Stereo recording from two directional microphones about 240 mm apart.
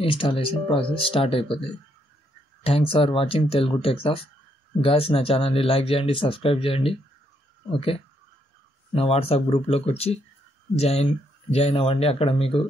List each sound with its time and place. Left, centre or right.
0.0 s speech: left